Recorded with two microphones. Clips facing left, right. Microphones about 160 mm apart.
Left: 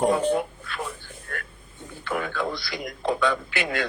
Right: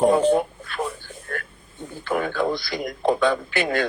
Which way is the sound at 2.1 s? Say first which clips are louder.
Right 5 dB; 40° right (ahead or behind).